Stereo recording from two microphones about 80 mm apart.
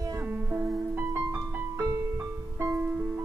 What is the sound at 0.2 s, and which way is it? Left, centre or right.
Music, right.